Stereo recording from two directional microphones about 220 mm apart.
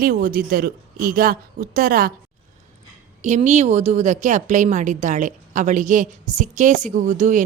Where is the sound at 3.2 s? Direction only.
35° right (ahead or behind).